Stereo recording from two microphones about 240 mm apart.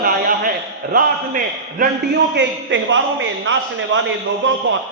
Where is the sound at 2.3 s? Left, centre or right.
Right.